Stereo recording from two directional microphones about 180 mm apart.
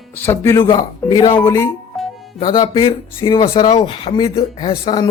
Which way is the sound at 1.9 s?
Centre (ahead or behind).